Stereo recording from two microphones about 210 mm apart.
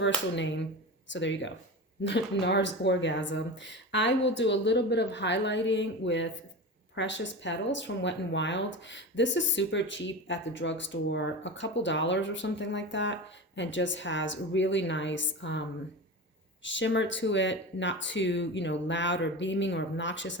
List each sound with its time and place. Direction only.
0.3 s speech: 60° left (ahead or behind)
16.6 s speech: 60° left (ahead or behind)